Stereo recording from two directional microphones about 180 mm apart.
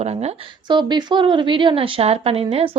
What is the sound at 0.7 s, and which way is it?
A woman's voice, 25° right (ahead or behind).